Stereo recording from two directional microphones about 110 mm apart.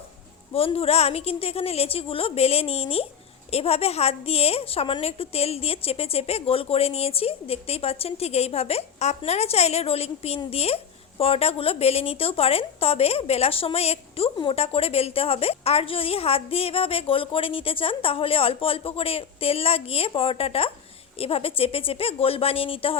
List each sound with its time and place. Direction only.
0.5 s a woman's voice: 65° left (ahead or behind)